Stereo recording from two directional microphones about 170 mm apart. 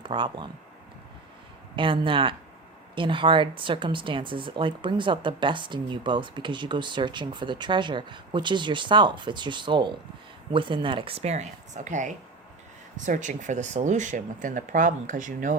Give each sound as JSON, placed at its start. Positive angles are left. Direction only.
{"t": 0.0, "sound": "speech", "side_deg": -30}
{"t": 1.7, "sound": "speech", "side_deg": -30}